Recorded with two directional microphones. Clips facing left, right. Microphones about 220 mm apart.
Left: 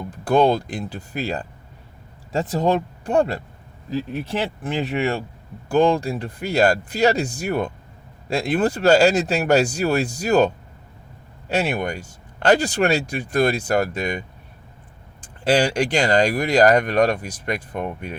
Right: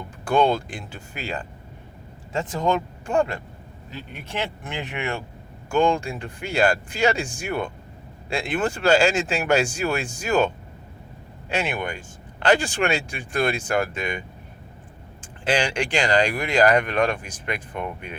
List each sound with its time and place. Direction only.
0.1 s speech: 35° left (ahead or behind)